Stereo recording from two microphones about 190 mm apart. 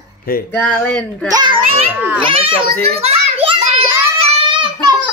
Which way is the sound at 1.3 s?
25° right (ahead or behind).